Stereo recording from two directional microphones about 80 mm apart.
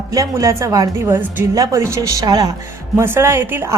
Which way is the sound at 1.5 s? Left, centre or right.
Right.